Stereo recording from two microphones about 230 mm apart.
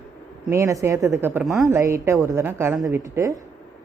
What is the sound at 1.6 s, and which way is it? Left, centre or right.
A woman's voice, centre.